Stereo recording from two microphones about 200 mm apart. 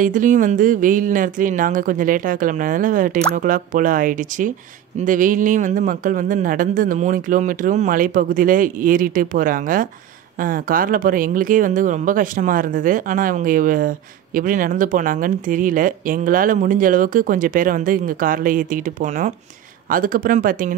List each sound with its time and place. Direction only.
0.0 s speech: 40° right (ahead or behind)